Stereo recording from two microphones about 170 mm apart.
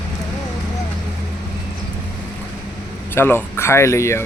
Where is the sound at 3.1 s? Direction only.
15° left (ahead or behind).